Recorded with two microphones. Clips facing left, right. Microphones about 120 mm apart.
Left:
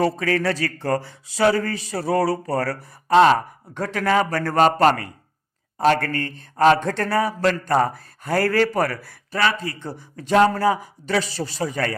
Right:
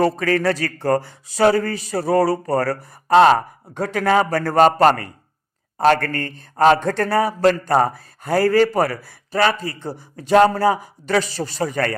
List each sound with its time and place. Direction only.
0.0 s speech: 45° right (ahead or behind)
8.4 s speech: 20° right (ahead or behind)
9.3 s speech: 35° right (ahead or behind)
11.3 s speech: 50° right (ahead or behind)